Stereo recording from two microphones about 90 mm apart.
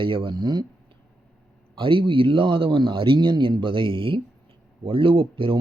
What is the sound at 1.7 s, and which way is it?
Speech, 75° right (ahead or behind).